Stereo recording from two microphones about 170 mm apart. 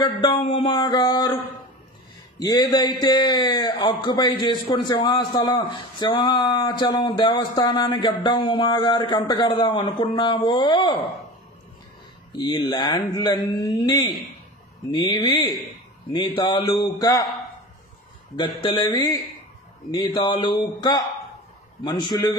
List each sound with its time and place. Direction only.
0.0 s speech: 30° left (ahead or behind)
12.4 s speech: 25° left (ahead or behind)
18.3 s speech: 25° left (ahead or behind)